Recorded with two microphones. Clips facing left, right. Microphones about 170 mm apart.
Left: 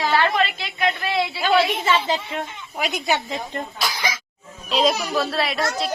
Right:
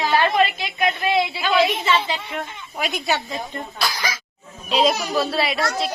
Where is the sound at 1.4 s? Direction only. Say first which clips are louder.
Even; 45° left (ahead or behind).